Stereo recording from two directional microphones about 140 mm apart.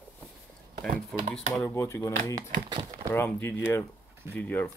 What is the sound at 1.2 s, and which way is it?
Speech, 60° right (ahead or behind).